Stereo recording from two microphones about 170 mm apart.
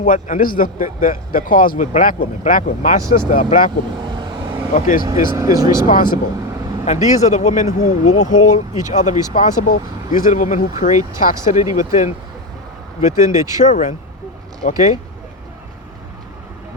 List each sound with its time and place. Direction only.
0.0 s speech: 50° left (ahead or behind)
3.9 s vehicle: 30° right (ahead or behind)
4.7 s speech: 50° left (ahead or behind)
5.0 s speech: 20° right (ahead or behind)
5.9 s speech: 55° left (ahead or behind)
6.8 s speech: 40° left (ahead or behind)
13.6 s speech: 45° left (ahead or behind)